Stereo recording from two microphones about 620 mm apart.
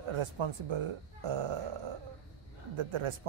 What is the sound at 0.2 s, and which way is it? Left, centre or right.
Speech, right.